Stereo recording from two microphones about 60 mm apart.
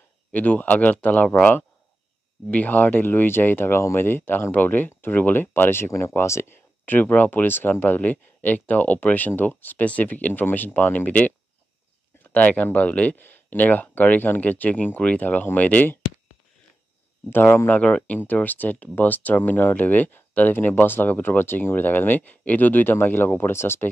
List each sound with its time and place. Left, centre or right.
0.3 s speech: left
6.9 s speech: left
17.3 s speech: left
17.7 s speech: centre; by 23.9 s left